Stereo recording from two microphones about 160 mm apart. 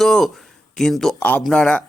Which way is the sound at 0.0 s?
Centre (ahead or behind).